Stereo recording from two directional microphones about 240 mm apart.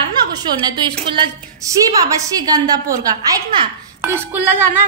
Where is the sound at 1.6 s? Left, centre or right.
Centre.